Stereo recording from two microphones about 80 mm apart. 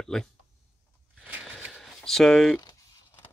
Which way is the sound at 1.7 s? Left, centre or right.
Centre.